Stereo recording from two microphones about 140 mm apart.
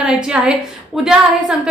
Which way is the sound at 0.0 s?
5° right (ahead or behind).